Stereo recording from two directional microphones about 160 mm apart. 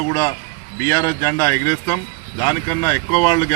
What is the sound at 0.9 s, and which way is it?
Speech, 15° left (ahead or behind).